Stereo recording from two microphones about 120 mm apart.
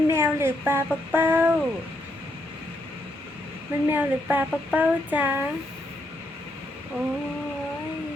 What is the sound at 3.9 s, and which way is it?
Speech, 15° right (ahead or behind).